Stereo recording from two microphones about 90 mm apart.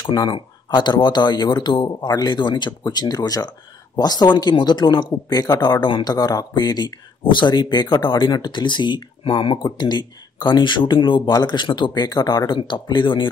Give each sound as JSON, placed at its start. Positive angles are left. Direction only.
{"t": 0.0, "sound": "speech", "side_deg": 50}